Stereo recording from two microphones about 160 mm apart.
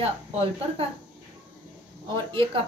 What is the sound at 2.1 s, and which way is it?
Speech, 30° right (ahead or behind).